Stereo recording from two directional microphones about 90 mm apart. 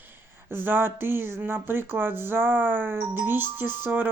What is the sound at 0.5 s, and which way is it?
Speech, 25° right (ahead or behind).